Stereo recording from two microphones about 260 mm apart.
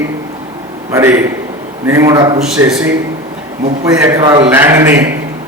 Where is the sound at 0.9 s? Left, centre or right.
Centre.